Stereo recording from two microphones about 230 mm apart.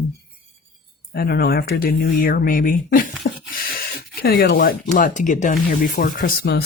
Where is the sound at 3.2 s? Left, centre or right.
Left.